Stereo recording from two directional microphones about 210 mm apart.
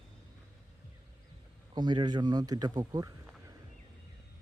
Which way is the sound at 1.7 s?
20° right (ahead or behind).